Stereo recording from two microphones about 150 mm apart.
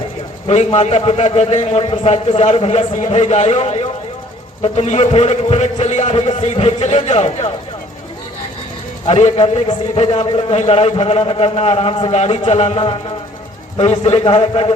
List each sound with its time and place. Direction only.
0.4 s a man's voice: 50° left (ahead or behind)
9.0 s a man's voice: 45° left (ahead or behind)